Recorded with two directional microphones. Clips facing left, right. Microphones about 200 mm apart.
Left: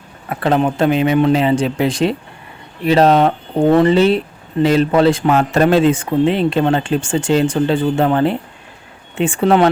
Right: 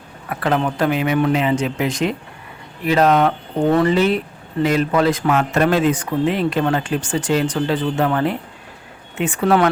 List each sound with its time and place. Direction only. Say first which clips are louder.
0.3 s speech: left 4 dB; 25° left (ahead or behind)